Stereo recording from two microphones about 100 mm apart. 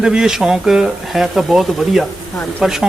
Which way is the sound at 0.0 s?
5° right (ahead or behind).